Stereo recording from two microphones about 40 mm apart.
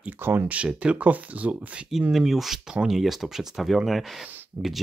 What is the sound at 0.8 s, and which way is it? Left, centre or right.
Speech, right.